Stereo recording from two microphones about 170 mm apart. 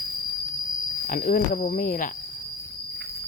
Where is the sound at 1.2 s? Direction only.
50° left (ahead or behind).